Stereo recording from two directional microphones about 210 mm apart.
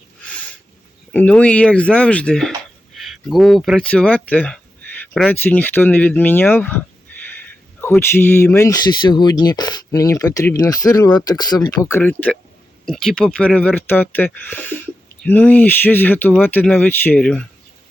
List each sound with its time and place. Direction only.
1.1 s speech: 5° left (ahead or behind)